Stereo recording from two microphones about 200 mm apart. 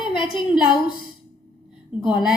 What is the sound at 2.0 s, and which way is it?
Speech, centre (ahead or behind).